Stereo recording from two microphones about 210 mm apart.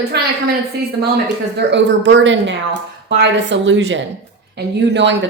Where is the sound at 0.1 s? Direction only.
50° right (ahead or behind).